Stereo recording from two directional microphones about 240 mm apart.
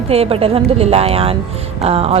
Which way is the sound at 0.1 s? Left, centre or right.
Right.